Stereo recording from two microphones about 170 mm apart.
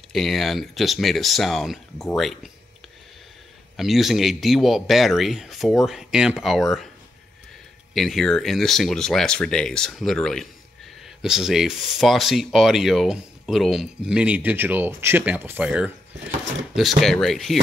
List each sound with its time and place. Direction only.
0.1 s speech: centre (ahead or behind)
3.7 s speech: centre (ahead or behind)
7.9 s speech: centre (ahead or behind)